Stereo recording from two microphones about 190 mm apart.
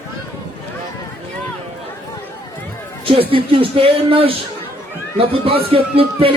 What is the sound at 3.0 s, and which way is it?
Speech, 30° right (ahead or behind).